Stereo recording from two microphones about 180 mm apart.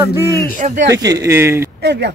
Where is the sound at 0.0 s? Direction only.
15° right (ahead or behind).